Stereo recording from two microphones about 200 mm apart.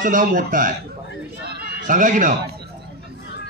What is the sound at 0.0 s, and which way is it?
Speech, 40° right (ahead or behind).